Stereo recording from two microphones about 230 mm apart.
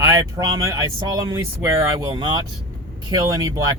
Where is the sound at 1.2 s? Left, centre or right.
Centre.